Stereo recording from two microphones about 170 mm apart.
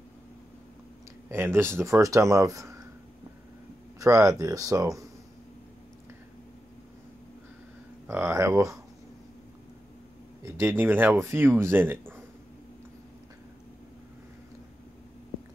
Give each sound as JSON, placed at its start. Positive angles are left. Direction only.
{"t": 1.3, "sound": "speech", "side_deg": -15}
{"t": 4.0, "sound": "speech", "side_deg": -20}
{"t": 8.2, "sound": "speech", "side_deg": -20}
{"t": 10.4, "sound": "speech", "side_deg": -15}